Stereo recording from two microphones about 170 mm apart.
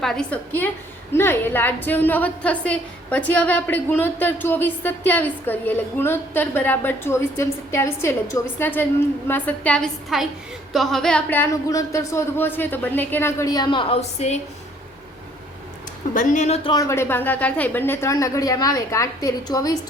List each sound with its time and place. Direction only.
0.0 s a woman's voice: 5° left (ahead or behind); by 14.3 s 40° left (ahead or behind)
16.1 s a woman's voice: 50° left (ahead or behind)
16.6 s a woman's voice: 20° left (ahead or behind)